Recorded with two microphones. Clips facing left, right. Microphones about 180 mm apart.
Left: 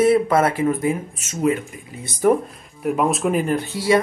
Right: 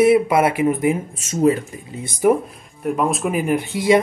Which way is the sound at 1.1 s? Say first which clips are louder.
Right 4 dB; 30° right (ahead or behind).